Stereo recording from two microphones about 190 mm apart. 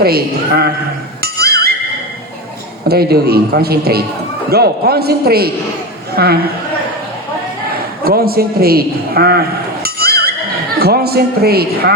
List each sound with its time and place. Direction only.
0.0 s a man's voice: 55° right (ahead or behind)
1.2 s music: 55° right (ahead or behind)
2.9 s a man's voice: 55° right (ahead or behind)
7.7 s a sound: 55° right (ahead or behind)
10.8 s a man's voice: 55° right (ahead or behind)